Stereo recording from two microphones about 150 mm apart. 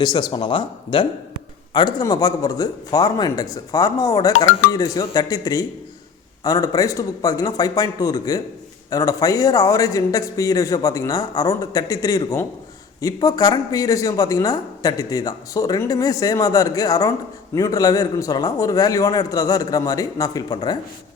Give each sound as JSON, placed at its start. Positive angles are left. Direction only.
{"t": 0.0, "sound": "speech", "side_deg": 30}